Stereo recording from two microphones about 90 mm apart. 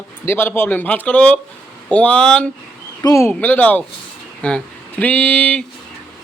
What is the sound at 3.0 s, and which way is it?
Speech, 35° left (ahead or behind).